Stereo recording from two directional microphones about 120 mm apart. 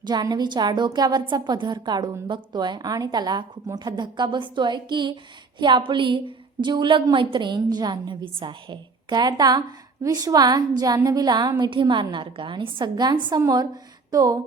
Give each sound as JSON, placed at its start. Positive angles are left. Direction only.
{"t": 0.0, "sound": "a woman's voice", "side_deg": -35}